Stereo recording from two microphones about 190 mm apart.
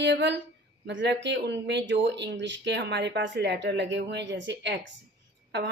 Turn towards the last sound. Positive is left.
turn(degrees=-60)  # may be behind; listen again after turning